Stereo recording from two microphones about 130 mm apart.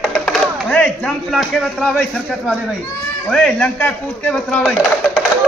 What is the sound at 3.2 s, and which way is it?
Speech, 5° left (ahead or behind).